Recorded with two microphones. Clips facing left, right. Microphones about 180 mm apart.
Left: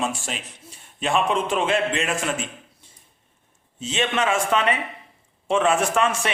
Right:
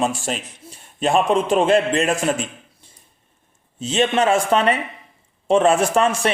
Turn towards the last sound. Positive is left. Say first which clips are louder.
# right 4 dB
turn(degrees=-35)  # may be behind; listen again after turning